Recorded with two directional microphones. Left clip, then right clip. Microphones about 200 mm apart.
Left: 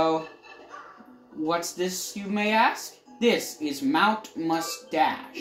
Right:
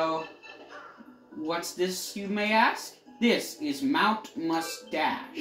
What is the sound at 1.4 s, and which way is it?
Speech, 55° left (ahead or behind).